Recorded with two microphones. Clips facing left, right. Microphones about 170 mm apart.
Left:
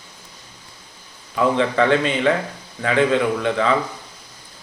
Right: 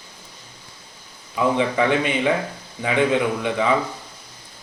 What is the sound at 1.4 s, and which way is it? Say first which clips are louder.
A man's voice: left 2 dB; 15° right (ahead or behind).